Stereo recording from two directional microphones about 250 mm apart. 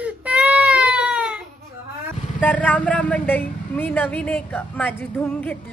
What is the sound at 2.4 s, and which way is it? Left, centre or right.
A woman's voice, centre.